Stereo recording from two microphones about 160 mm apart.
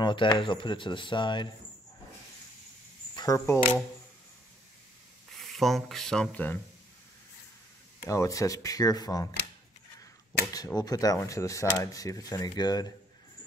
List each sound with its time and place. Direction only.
0.0 s speech: 30° left (ahead or behind)
3.2 s speech: 20° left (ahead or behind)
5.5 s speech: centre (ahead or behind)
8.0 s speech: 20° left (ahead or behind)
10.8 s speech: 20° left (ahead or behind)